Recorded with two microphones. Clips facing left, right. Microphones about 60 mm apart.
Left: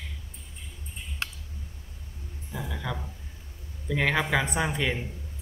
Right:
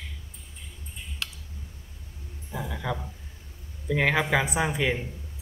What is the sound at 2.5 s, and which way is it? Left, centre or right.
A man's voice, centre.